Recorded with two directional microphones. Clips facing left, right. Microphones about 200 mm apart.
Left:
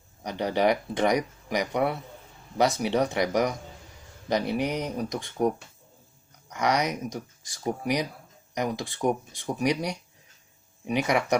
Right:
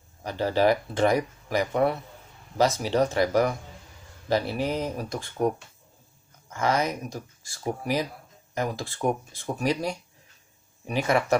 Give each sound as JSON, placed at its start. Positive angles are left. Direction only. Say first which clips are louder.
{"t": 0.2, "sound": "speech", "louder": "right 2 dB", "side_deg": 15}
{"t": 6.5, "sound": "speech", "louder": "even", "side_deg": 20}